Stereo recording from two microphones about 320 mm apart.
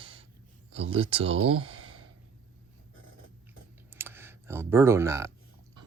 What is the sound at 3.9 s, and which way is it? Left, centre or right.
Clicking, centre.